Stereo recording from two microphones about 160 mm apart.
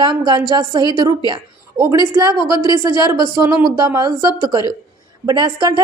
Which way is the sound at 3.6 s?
25° right (ahead or behind).